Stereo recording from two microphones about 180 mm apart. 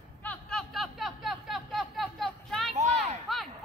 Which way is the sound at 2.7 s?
40° right (ahead or behind).